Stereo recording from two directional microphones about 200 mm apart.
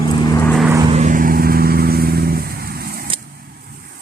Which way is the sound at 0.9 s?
35° right (ahead or behind).